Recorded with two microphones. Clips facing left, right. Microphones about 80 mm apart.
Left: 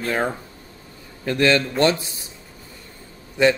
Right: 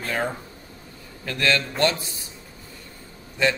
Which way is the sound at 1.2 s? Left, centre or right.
Left.